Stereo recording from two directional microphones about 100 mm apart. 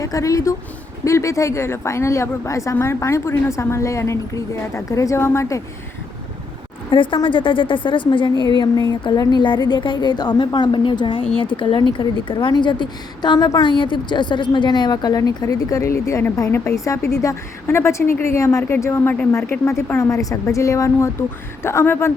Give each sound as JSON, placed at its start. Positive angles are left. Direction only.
{"t": 0.0, "sound": "a woman's voice", "side_deg": 35}
{"t": 6.9, "sound": "a woman's voice", "side_deg": 55}